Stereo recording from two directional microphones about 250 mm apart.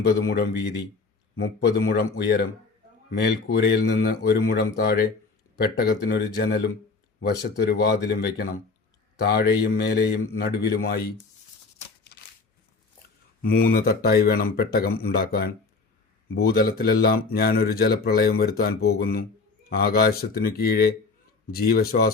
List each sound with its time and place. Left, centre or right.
0.0 s a man's voice: left
13.4 s speech: left